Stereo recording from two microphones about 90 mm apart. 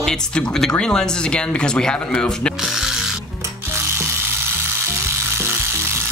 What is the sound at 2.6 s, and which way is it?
Speech, 5° right (ahead or behind).